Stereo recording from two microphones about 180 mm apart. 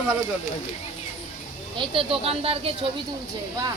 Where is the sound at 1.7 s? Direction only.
30° right (ahead or behind).